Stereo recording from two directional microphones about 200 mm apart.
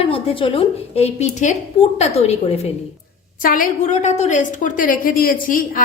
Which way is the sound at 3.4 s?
45° left (ahead or behind).